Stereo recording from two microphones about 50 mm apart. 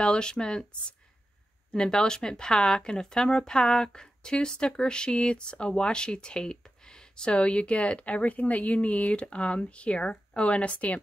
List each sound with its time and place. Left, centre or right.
0.0 s speech: centre